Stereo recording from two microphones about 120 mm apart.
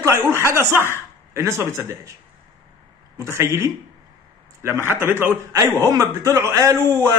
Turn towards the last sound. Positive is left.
turn(degrees=-25)  # may be behind; listen again after turning